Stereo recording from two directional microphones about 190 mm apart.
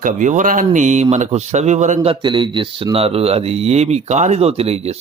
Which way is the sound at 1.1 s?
40° right (ahead or behind).